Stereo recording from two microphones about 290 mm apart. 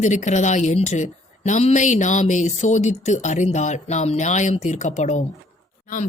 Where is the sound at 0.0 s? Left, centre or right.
Left.